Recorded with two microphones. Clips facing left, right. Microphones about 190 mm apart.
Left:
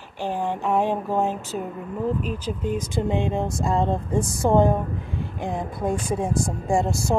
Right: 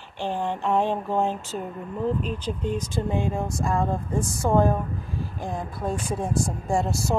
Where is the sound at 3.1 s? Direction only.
20° left (ahead or behind).